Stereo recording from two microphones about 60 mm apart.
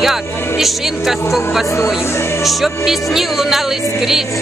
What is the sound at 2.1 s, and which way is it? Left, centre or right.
Music, left.